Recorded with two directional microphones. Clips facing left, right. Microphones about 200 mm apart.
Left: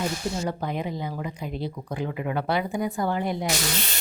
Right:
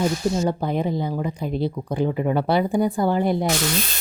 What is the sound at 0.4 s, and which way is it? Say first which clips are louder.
Speech: right 6 dB; 30° right (ahead or behind).